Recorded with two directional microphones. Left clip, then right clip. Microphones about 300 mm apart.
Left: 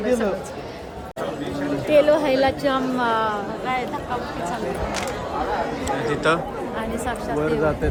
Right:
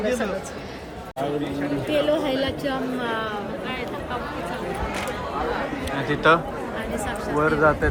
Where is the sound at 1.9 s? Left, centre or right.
Left.